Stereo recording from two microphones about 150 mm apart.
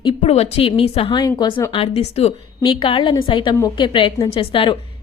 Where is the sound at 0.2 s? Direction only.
45° left (ahead or behind).